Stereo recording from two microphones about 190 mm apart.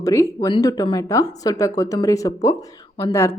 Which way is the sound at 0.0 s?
15° left (ahead or behind).